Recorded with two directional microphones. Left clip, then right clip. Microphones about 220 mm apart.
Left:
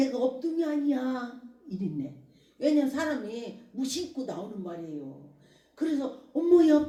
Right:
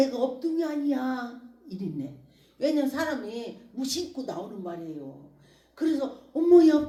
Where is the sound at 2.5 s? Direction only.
30° right (ahead or behind).